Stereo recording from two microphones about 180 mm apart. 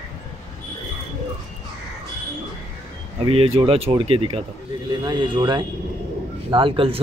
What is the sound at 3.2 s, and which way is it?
Speech, 30° right (ahead or behind).